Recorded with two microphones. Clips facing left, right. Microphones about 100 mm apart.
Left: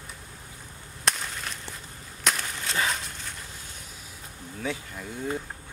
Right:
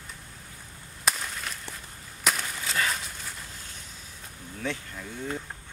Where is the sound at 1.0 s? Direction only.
Centre (ahead or behind).